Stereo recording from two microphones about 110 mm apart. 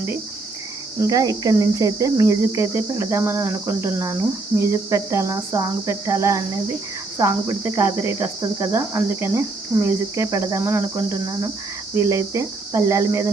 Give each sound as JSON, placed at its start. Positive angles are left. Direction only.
{"t": 0.9, "sound": "speech", "side_deg": -35}